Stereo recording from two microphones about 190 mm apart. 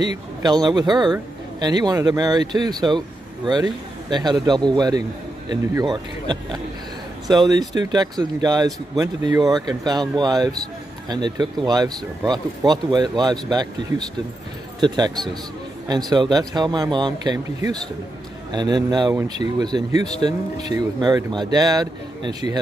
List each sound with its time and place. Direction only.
0.4 s speech: 20° right (ahead or behind)